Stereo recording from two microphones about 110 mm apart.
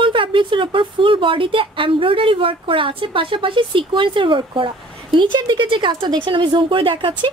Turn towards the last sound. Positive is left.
turn(degrees=-50)  # may be behind; listen again after turning